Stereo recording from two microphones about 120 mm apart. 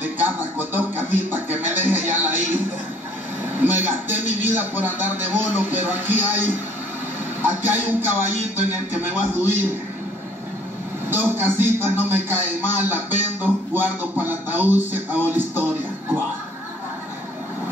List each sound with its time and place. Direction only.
0.0 s music: 15° right (ahead or behind)
3.5 s a sound: 15° right (ahead or behind)
7.4 s music: 15° right (ahead or behind)
9.3 s a man's voice: 15° right (ahead or behind)
11.1 s a man's voice: 20° right (ahead or behind)